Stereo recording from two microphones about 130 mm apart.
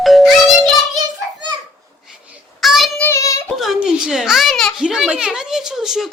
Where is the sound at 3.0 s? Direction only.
25° left (ahead or behind).